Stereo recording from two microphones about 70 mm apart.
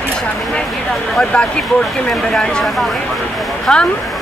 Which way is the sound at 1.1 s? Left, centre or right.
Centre.